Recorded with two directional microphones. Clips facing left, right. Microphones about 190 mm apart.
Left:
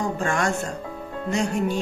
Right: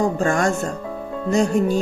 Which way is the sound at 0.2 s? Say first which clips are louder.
Right 5 dB; 40° right (ahead or behind).